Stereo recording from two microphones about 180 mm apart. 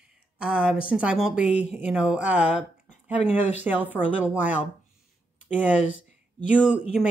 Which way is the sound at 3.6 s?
10° right (ahead or behind).